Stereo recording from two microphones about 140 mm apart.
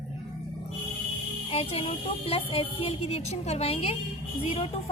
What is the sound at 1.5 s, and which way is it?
Speech, 45° left (ahead or behind).